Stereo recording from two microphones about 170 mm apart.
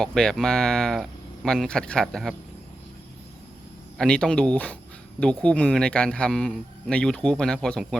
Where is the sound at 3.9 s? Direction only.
5° left (ahead or behind).